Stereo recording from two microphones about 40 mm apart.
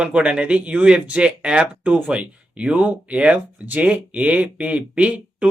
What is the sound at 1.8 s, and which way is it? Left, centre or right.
Speech, right.